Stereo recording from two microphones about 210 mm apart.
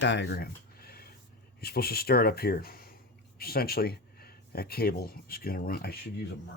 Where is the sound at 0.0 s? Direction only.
55° left (ahead or behind).